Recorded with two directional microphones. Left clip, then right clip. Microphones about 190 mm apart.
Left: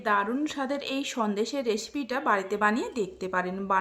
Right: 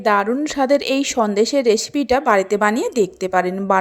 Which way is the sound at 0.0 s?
35° right (ahead or behind).